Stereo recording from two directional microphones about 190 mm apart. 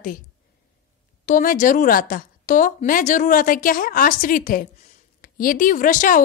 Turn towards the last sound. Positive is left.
turn(degrees=45)  # may be behind; listen again after turning